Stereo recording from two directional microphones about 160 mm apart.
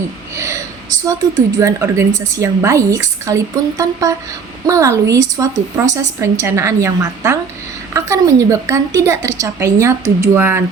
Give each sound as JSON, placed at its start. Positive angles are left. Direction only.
{"t": 1.5, "sound": "a woman's voice", "side_deg": -15}